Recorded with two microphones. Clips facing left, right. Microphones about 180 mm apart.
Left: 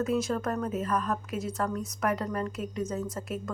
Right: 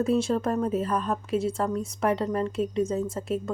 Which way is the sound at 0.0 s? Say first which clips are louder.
Right 4 dB; 30° right (ahead or behind).